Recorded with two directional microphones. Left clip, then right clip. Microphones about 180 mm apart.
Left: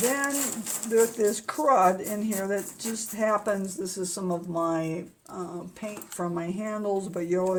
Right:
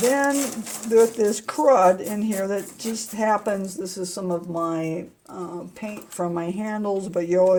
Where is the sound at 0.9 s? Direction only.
35° right (ahead or behind).